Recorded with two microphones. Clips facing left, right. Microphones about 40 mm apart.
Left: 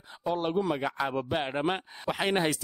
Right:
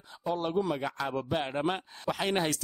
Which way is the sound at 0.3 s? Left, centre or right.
Centre.